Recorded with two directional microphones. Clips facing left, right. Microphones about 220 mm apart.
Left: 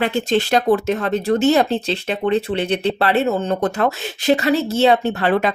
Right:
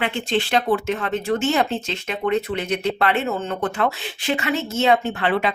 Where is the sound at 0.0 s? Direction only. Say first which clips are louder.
Left 5 dB; 40° left (ahead or behind).